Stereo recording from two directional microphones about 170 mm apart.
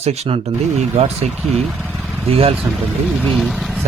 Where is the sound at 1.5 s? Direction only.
5° left (ahead or behind).